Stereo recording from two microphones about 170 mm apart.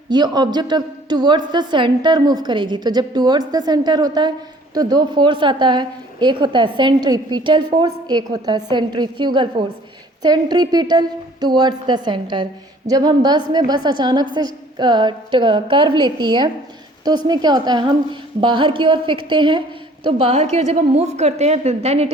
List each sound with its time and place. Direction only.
0.1 s a woman's voice: 25° right (ahead or behind)